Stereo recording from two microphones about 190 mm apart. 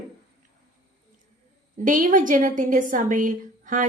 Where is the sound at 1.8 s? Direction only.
45° right (ahead or behind).